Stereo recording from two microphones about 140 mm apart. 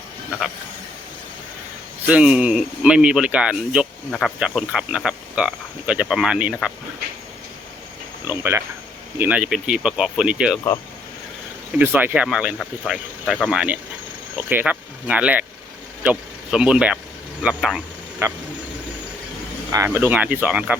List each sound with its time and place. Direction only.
2.0 s speech: 10° right (ahead or behind)
8.3 s speech: 15° right (ahead or behind)
11.8 s speech: 15° right (ahead or behind)
18.2 s speech: 20° right (ahead or behind)
19.7 s speech: 15° right (ahead or behind)